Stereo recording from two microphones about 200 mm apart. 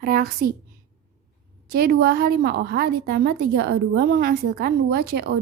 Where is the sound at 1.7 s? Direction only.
50° right (ahead or behind).